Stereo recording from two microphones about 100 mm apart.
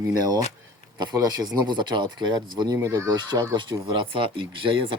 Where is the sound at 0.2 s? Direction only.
40° right (ahead or behind).